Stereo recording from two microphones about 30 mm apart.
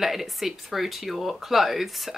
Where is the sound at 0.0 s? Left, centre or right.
Centre.